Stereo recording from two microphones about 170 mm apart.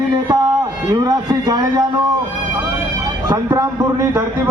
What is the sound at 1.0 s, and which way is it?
Speech, 20° right (ahead or behind).